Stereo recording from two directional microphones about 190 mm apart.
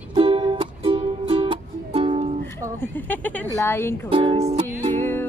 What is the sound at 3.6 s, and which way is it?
Speech, 10° left (ahead or behind).